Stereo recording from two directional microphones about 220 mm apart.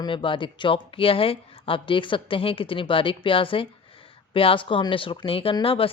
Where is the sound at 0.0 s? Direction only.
25° left (ahead or behind).